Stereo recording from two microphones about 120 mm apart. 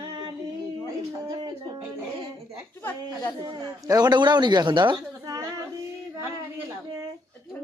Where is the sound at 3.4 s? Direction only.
30° right (ahead or behind).